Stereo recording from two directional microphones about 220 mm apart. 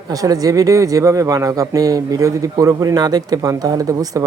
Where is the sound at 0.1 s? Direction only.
15° right (ahead or behind).